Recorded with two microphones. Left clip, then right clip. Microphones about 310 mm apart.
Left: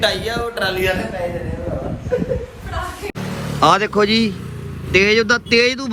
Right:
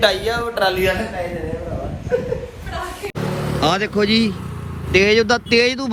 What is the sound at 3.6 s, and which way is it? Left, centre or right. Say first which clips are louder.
A man's voice: left 5 dB; centre.